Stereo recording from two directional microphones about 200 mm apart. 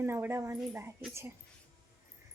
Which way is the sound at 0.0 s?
10° right (ahead or behind).